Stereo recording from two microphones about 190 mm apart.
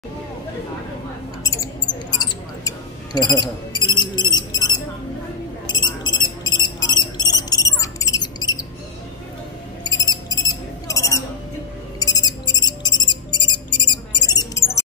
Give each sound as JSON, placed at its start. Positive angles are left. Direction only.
{"t": 1.4, "sound": "mouse", "side_deg": 20}
{"t": 5.7, "sound": "cricket", "side_deg": 25}
{"t": 9.8, "sound": "cricket", "side_deg": 20}
{"t": 12.0, "sound": "music", "side_deg": 20}